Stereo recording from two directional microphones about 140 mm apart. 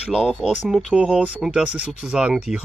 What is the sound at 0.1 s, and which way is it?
Speech, centre (ahead or behind).